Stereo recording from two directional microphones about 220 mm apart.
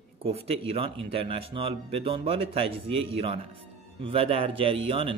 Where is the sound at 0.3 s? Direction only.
25° right (ahead or behind).